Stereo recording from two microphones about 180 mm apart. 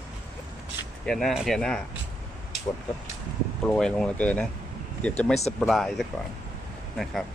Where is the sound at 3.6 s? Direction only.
5° left (ahead or behind).